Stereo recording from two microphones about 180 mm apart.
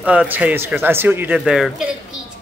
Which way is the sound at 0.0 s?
5° right (ahead or behind).